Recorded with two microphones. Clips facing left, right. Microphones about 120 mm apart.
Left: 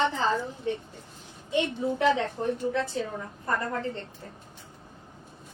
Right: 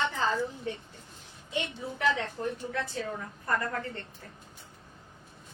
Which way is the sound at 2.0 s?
25° left (ahead or behind).